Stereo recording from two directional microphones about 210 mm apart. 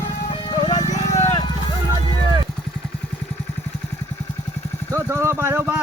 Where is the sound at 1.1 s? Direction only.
15° left (ahead or behind).